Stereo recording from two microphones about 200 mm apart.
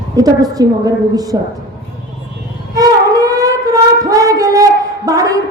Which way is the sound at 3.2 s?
15° right (ahead or behind).